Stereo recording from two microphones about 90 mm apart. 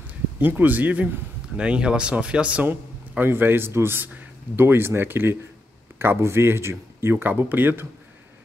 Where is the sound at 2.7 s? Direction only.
25° right (ahead or behind).